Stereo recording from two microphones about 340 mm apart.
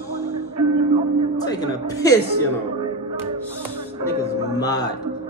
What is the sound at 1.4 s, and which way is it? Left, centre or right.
Music, centre.